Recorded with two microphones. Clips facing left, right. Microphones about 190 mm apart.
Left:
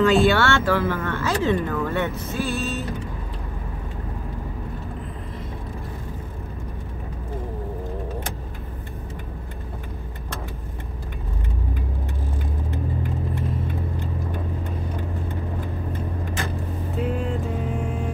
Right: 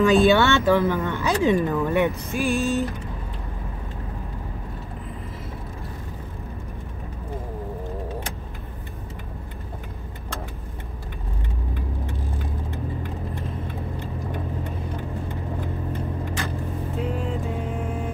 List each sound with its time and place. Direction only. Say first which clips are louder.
0.0 s speech: right 1 dB; 15° right (ahead or behind)
17.0 s music: left 3 dB; centre (ahead or behind)